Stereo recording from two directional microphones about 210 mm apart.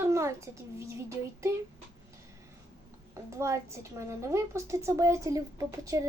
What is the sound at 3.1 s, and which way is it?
A woman's voice, 15° right (ahead or behind).